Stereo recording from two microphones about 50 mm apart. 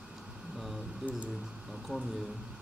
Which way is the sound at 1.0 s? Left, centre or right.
Centre.